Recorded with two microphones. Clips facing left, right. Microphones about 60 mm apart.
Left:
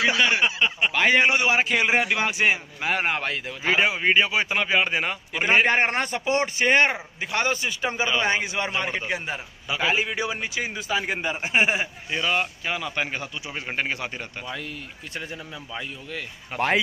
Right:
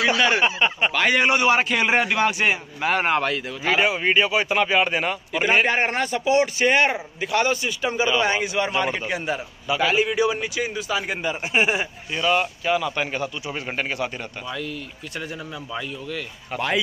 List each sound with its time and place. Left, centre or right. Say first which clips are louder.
0.0 s a man's voice: right 2 dB; centre
0.4 s speech: right 2 dB; centre
0.9 s a man's voice: left 1 dB; centre
2.8 s speech: right 8 dB; centre
3.3 s a man's voice: right 2 dB; centre
5.4 s a man's voice: even; left
5.7 s speech: even; left
6.7 s a man's voice: even; left
11.4 s a man's voice: right 1 dB; centre
13.9 s a man's voice: right 4 dB; left
16.5 s speech: left 1 dB; left